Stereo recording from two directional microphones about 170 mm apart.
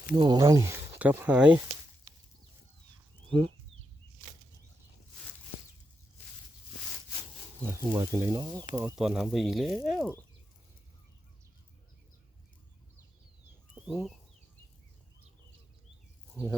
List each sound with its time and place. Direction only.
0.2 s speech: 25° right (ahead or behind); by 1.6 s 5° right (ahead or behind)
3.2 s speech: 30° right (ahead or behind)
7.6 s speech: 15° right (ahead or behind)
9.0 s speech: 5° right (ahead or behind)
13.7 s chicken: 5° right (ahead or behind)
16.3 s speech: 15° right (ahead or behind)